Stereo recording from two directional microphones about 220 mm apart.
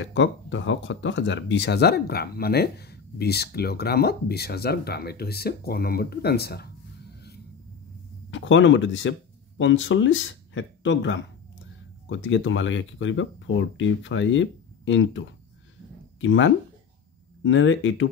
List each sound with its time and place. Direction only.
0.0 s speech: 55° left (ahead or behind)
8.3 s speech: 60° left (ahead or behind)